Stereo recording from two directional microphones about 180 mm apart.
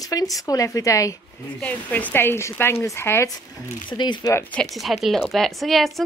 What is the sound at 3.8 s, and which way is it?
Speech, 25° left (ahead or behind).